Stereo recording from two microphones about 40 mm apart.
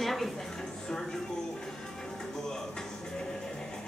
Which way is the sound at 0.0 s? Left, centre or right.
Centre.